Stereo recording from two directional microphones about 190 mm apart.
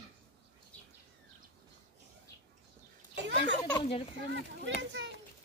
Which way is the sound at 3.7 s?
30° left (ahead or behind).